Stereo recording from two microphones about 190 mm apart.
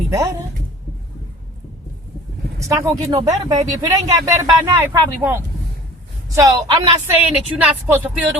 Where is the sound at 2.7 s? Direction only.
15° right (ahead or behind).